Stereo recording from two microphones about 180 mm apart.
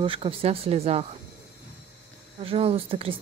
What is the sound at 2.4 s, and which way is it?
Speech, 30° right (ahead or behind).